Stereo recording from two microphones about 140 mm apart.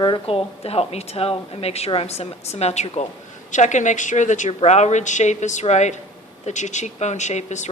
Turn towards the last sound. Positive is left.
turn(degrees=55)  # may be behind; listen again after turning